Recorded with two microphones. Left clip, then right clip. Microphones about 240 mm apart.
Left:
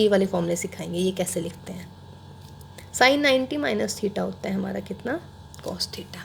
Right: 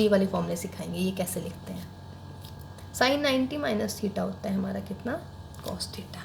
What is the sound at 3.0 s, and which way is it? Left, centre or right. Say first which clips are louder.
A woman's voice: left 6 dB; left.